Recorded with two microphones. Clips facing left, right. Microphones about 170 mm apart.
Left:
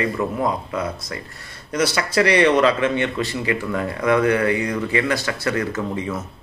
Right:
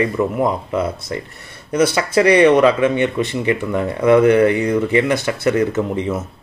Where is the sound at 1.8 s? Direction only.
20° right (ahead or behind).